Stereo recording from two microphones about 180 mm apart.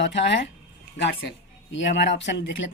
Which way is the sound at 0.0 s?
80° left.